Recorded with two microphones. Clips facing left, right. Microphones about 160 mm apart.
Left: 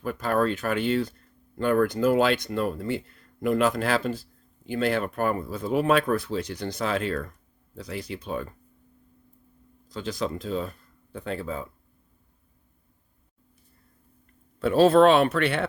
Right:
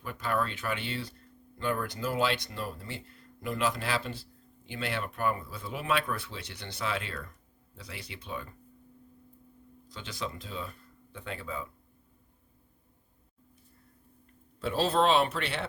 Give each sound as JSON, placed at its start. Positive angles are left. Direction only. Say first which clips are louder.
{"t": 0.0, "sound": "speech", "louder": "left 7 dB", "side_deg": 45}
{"t": 9.9, "sound": "speech", "louder": "left 9 dB", "side_deg": 40}
{"t": 14.6, "sound": "speech", "louder": "left 10 dB", "side_deg": 60}